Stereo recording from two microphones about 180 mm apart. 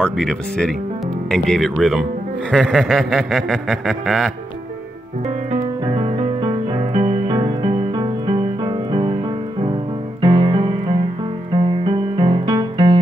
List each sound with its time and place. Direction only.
0.0 s a sound: 5° left (ahead or behind)
5.9 s music: 30° right (ahead or behind)
7.3 s music: 25° right (ahead or behind)
10.2 s music: 30° right (ahead or behind)
12.2 s music: 25° right (ahead or behind)